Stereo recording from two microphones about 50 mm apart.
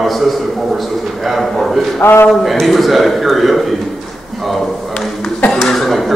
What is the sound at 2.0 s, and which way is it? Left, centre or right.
Speech, left.